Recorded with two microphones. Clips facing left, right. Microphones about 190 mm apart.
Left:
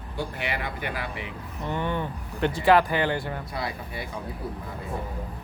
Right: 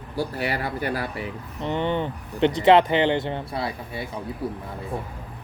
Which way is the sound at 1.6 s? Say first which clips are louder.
Right 4 dB; 20° right (ahead or behind).